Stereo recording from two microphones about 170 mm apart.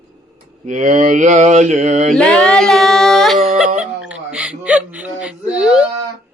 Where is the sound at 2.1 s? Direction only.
5° left (ahead or behind).